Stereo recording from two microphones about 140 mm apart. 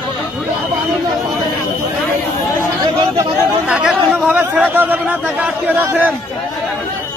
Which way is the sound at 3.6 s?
10° right (ahead or behind).